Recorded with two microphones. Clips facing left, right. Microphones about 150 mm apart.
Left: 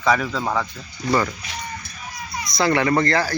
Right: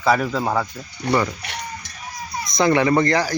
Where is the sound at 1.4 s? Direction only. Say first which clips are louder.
Right 1 dB; 70° right (ahead or behind).